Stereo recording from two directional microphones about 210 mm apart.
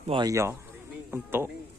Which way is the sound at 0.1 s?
20° right (ahead or behind).